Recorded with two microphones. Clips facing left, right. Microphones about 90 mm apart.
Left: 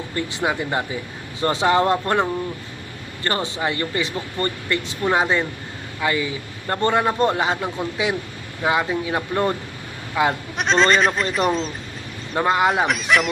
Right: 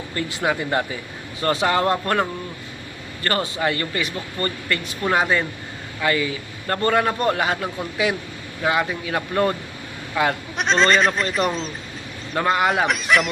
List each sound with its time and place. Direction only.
0.3 s a man's voice: 15° left (ahead or behind)
3.2 s a man's voice: 20° left (ahead or behind)
10.6 s speech: centre (ahead or behind)
12.4 s a man's voice: 20° left (ahead or behind)
12.8 s speech: centre (ahead or behind)